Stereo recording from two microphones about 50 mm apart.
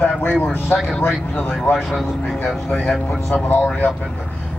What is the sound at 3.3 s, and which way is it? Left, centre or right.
Speech, left.